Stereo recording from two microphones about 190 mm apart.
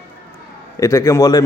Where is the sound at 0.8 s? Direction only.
15° left (ahead or behind).